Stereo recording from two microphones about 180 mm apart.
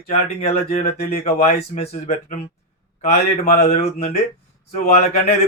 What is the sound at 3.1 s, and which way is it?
Speech, 35° left (ahead or behind).